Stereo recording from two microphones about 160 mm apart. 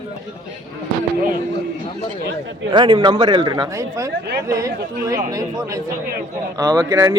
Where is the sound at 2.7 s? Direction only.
30° right (ahead or behind).